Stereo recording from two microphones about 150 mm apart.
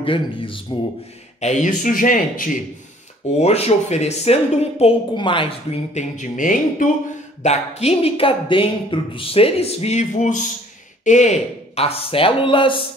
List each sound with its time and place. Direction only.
0.0 s speech: 35° left (ahead or behind)
1.4 s speech: 55° left (ahead or behind)
3.3 s speech: 45° left (ahead or behind)
5.1 s speech: 35° left (ahead or behind)
5.9 s speech: 55° left (ahead or behind)
7.4 s speech: 45° left (ahead or behind)